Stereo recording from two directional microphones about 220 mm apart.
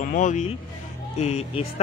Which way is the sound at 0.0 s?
35° left (ahead or behind).